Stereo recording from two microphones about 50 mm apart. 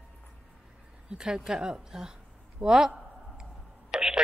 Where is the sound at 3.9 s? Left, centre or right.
Centre.